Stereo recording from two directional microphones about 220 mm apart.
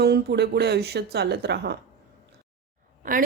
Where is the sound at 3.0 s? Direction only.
40° right (ahead or behind).